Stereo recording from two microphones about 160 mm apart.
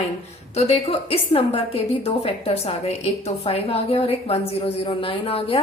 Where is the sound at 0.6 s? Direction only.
40° left (ahead or behind).